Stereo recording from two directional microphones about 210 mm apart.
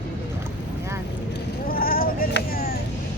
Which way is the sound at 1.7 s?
45° left (ahead or behind).